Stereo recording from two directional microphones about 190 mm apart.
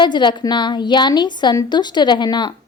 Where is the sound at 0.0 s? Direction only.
25° left (ahead or behind).